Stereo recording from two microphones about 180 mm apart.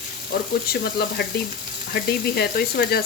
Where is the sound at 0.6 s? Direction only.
60° left (ahead or behind).